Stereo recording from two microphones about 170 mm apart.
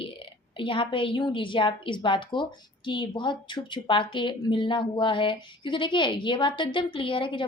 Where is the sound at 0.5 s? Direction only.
30° left (ahead or behind).